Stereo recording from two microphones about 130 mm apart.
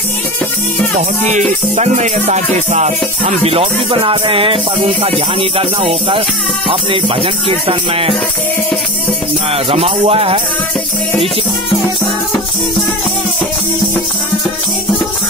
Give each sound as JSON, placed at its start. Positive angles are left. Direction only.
{"t": 1.8, "sound": "music", "side_deg": -65}
{"t": 3.4, "sound": "music", "side_deg": -50}
{"t": 7.4, "sound": "music", "side_deg": -45}
{"t": 9.5, "sound": "music", "side_deg": -50}